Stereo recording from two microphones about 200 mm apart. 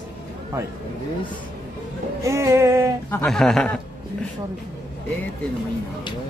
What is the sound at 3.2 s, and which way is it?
Speech, centre (ahead or behind).